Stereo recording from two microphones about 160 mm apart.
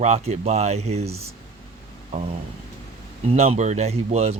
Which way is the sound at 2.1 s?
45° right (ahead or behind).